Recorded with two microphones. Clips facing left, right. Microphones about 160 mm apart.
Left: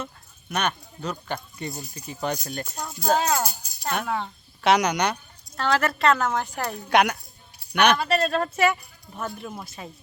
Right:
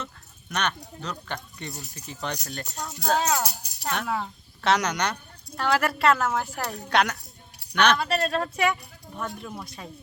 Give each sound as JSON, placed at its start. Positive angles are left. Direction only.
{"t": 0.0, "sound": "a sound", "side_deg": 10}
{"t": 1.0, "sound": "speech", "side_deg": 10}
{"t": 3.5, "sound": "music", "side_deg": -75}
{"t": 3.8, "sound": "speech", "side_deg": 0}
{"t": 4.6, "sound": "speech", "side_deg": 15}
{"t": 5.5, "sound": "speech", "side_deg": -10}
{"t": 6.9, "sound": "speech", "side_deg": 10}
{"t": 7.9, "sound": "speech", "side_deg": 0}